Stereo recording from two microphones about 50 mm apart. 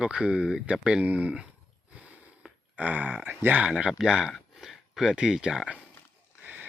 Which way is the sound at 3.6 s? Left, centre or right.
Right.